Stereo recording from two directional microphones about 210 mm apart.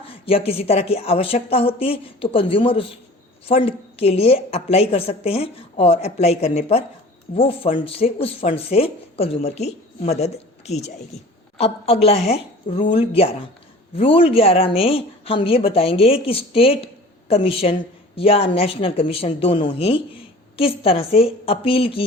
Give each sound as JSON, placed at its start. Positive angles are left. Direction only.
{"t": 0.3, "sound": "a woman's voice", "side_deg": 25}